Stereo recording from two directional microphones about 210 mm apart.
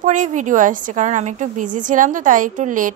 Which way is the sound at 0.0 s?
35° right (ahead or behind).